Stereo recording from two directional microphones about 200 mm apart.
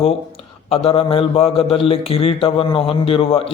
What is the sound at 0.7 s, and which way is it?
A man's voice, 30° left (ahead or behind).